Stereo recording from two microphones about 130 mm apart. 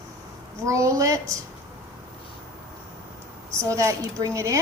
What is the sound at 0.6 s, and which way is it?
Speech, 25° right (ahead or behind).